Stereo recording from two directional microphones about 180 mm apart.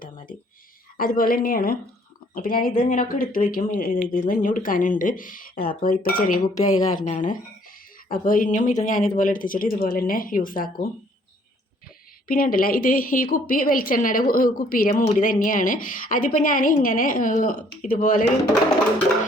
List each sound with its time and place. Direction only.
0.9 s a woman's voice: 50° left (ahead or behind)
6.6 s a woman's voice: 20° left (ahead or behind)
6.9 s a woman's voice: 45° left (ahead or behind)
12.3 s a woman's voice: 55° left (ahead or behind)